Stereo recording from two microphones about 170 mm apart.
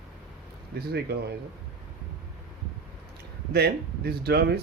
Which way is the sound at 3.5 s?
70° right (ahead or behind).